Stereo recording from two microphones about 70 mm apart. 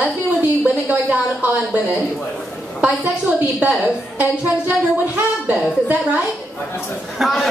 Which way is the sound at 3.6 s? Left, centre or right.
Right.